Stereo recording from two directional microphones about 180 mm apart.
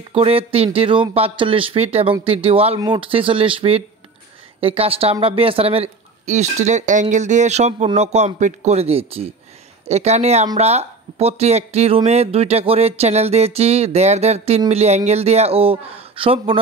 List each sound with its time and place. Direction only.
0.1 s speech: 30° right (ahead or behind)